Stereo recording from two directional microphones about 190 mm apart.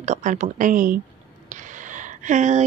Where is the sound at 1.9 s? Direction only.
40° right (ahead or behind).